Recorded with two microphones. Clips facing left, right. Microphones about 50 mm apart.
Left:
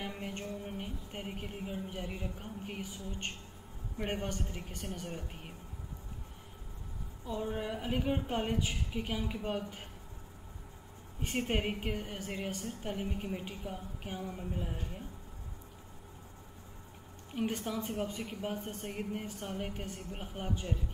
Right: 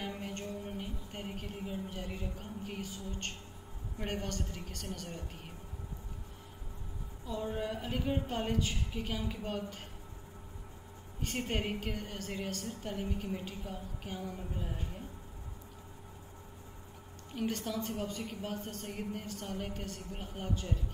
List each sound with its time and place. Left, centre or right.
0.0 s music: centre
4.0 s speech: left
7.4 s a woman's voice: centre
11.1 s a woman's voice: centre
17.3 s a woman's voice: centre